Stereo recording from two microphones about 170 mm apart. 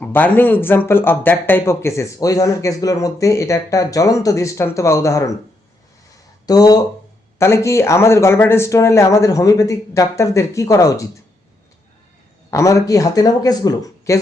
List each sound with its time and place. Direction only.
0.0 s speech: 10° left (ahead or behind)
6.4 s speech: 20° left (ahead or behind)
12.5 s speech: 20° left (ahead or behind)